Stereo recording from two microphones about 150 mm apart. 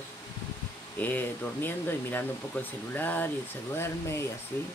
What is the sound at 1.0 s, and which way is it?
Speech, 10° left (ahead or behind).